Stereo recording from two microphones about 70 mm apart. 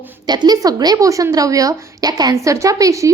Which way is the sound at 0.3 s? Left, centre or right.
Right.